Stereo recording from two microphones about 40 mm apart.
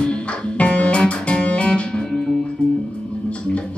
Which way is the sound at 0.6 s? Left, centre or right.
Left.